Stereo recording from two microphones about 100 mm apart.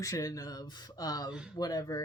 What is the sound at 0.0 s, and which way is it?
Speech, 35° left (ahead or behind).